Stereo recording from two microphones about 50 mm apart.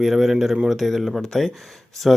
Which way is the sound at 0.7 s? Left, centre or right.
Centre.